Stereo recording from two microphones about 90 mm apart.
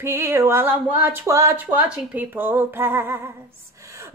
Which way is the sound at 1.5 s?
15° right (ahead or behind).